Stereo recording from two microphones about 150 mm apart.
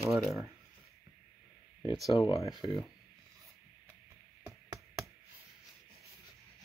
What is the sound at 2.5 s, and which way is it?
Speech, centre (ahead or behind).